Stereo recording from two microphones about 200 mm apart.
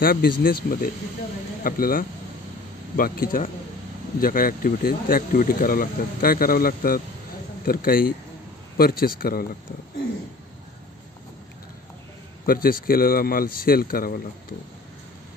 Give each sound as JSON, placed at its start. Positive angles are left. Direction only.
{"t": 0.0, "sound": "speech", "side_deg": 45}
{"t": 12.4, "sound": "speech", "side_deg": 45}